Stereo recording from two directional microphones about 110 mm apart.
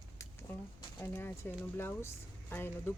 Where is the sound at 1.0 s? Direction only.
20° left (ahead or behind).